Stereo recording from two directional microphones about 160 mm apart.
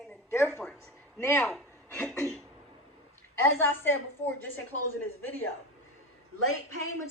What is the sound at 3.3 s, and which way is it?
Speech, 15° left (ahead or behind).